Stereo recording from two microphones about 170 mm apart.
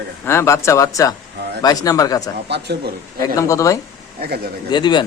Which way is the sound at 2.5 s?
70° right (ahead or behind).